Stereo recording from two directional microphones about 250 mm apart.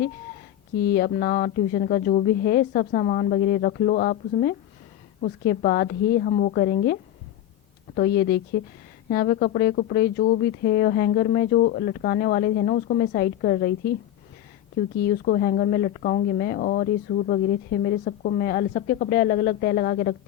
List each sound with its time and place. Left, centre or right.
0.8 s speech: left
14.9 s speech: left